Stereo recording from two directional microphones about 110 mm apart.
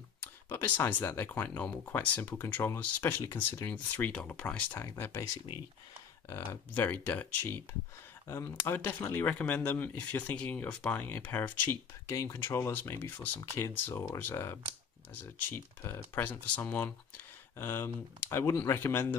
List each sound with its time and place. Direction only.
0.5 s speech: 20° left (ahead or behind)
4.7 s speech: 25° left (ahead or behind)
6.2 s speech: 20° left (ahead or behind)
8.6 s speech: 20° left (ahead or behind)